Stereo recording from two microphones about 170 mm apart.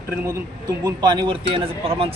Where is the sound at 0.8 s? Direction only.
25° right (ahead or behind).